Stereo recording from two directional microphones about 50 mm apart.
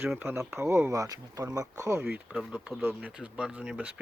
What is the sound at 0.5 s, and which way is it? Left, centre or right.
Speech, right.